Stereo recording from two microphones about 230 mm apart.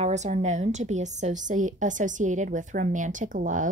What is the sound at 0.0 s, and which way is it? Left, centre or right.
A woman's voice, right.